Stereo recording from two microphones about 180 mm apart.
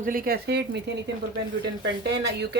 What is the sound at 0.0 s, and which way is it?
Speech, 55° right (ahead or behind).